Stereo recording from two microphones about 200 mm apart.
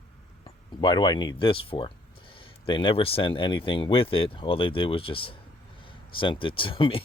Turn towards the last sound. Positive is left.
turn(degrees=25)  # may be behind; listen again after turning